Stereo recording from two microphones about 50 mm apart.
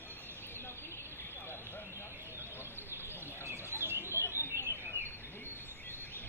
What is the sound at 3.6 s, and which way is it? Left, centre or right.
Bird, left.